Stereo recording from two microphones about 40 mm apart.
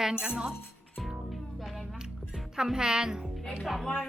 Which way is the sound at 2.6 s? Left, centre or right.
Centre.